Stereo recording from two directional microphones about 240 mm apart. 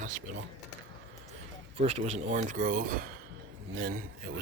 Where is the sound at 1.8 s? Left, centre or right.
Right.